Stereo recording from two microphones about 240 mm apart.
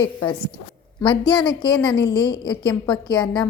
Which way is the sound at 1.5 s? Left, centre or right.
Centre.